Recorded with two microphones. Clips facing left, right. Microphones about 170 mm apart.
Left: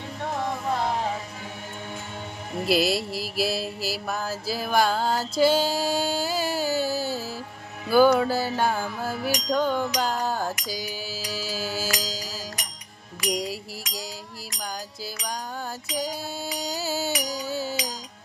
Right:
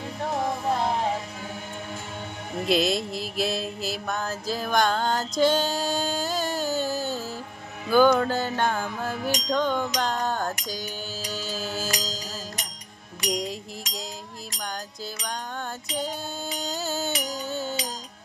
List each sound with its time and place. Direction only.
2.6 s a sound: 5° left (ahead or behind)
7.9 s music: 5° left (ahead or behind)
13.3 s music: 5° left (ahead or behind)
15.9 s music: 10° left (ahead or behind)